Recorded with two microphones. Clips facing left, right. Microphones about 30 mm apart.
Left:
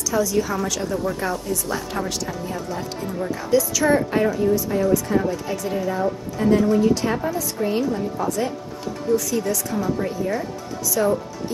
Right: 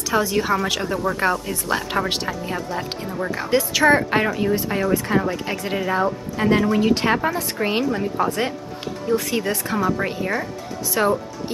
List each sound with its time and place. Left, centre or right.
0.1 s speech: right